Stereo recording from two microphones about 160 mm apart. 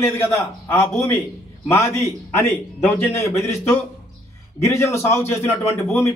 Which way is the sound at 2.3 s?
15° left (ahead or behind).